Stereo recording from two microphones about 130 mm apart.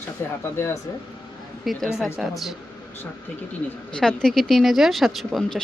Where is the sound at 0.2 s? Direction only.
20° left (ahead or behind).